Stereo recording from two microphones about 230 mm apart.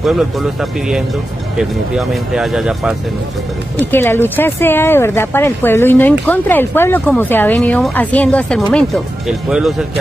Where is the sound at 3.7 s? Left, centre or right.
Centre.